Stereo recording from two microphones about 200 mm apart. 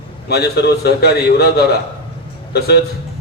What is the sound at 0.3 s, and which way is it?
A man's voice, 55° left (ahead or behind).